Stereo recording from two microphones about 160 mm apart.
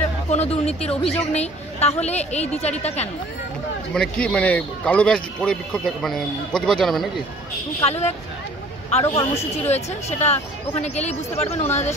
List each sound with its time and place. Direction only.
0.3 s a woman's voice: 40° left (ahead or behind)
3.9 s a man's voice: 5° left (ahead or behind)
7.8 s a woman's voice: 40° left (ahead or behind)